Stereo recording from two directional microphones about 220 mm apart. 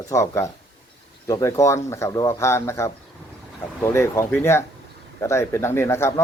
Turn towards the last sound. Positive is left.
turn(degrees=10)  # may be behind; listen again after turning